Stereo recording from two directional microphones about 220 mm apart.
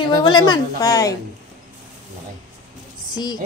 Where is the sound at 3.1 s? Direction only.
20° left (ahead or behind).